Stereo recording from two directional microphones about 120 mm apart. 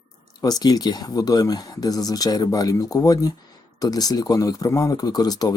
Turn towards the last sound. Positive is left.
turn(degrees=30)  # may be behind; listen again after turning